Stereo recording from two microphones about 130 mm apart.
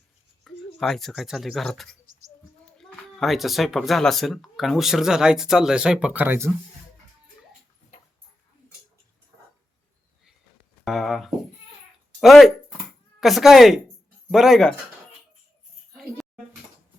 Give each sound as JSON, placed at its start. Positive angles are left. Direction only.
{"t": 0.4, "sound": "speech", "side_deg": 0}
{"t": 10.8, "sound": "speech", "side_deg": 0}